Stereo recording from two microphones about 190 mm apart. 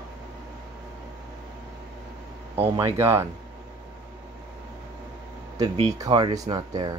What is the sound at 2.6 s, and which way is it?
Speech, 15° right (ahead or behind).